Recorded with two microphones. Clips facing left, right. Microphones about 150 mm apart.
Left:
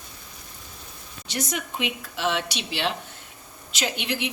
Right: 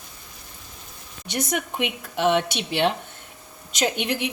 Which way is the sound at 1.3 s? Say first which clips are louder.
Right 4 dB; 55° right (ahead or behind).